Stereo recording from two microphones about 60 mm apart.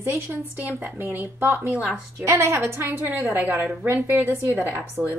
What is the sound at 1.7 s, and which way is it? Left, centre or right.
Speech, right.